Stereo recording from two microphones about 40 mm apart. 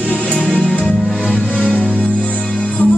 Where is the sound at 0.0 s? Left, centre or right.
Left.